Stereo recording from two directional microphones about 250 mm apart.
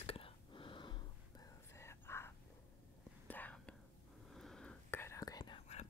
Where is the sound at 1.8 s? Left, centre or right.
Centre.